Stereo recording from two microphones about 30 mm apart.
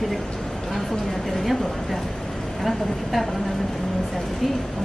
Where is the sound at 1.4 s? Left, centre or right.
Centre.